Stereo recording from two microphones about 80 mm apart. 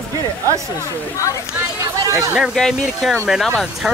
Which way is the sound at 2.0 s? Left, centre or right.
Right.